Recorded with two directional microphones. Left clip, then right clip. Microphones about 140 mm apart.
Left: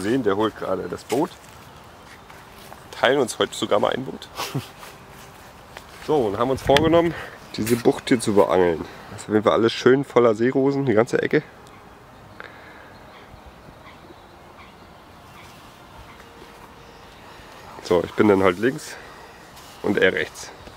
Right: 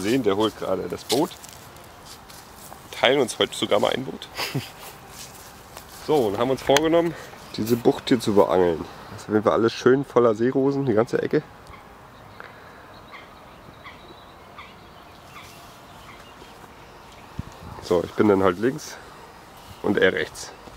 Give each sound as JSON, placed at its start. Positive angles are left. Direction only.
{"t": 0.0, "sound": "speech", "side_deg": 5}
{"t": 2.9, "sound": "speech", "side_deg": 10}
{"t": 6.0, "sound": "speech", "side_deg": 5}
{"t": 6.9, "sound": "speech", "side_deg": 25}
{"t": 7.5, "sound": "speech", "side_deg": 0}
{"t": 17.8, "sound": "speech", "side_deg": 5}